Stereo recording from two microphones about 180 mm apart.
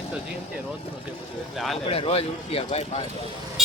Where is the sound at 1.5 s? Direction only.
Centre (ahead or behind).